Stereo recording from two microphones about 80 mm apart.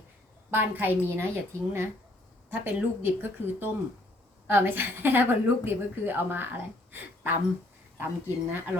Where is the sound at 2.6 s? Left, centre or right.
Right.